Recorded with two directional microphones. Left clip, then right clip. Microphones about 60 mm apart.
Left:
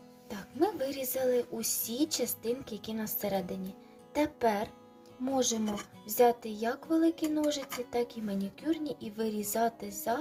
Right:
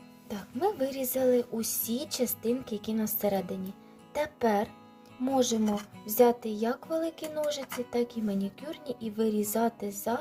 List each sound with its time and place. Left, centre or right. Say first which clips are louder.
0.6 s a woman's voice: right 2 dB; right
1.5 s a woman's voice: even; centre
5.2 s speech: right 3 dB; right
6.1 s speech: right 2 dB; right